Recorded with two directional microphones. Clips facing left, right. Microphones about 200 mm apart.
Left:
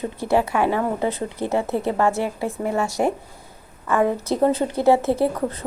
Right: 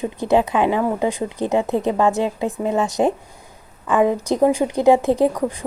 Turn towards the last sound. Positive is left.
turn(degrees=-15)  # may be behind; listen again after turning